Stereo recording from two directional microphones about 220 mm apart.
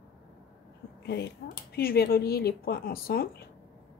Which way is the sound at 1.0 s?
50° left (ahead or behind).